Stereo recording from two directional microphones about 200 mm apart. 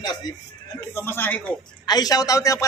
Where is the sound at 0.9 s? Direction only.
10° left (ahead or behind).